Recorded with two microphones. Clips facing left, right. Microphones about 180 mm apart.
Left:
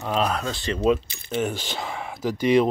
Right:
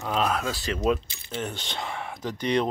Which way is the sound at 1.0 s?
50° left (ahead or behind).